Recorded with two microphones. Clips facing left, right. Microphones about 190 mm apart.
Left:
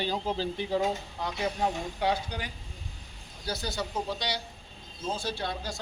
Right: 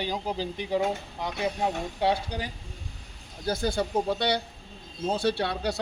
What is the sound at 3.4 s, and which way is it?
Speech, 50° right (ahead or behind).